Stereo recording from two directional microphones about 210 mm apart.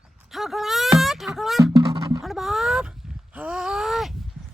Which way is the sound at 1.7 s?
15° right (ahead or behind).